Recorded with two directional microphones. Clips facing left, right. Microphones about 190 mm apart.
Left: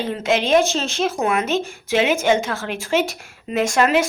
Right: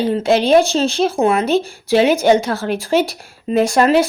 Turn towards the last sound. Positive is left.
turn(degrees=-35)  # may be behind; listen again after turning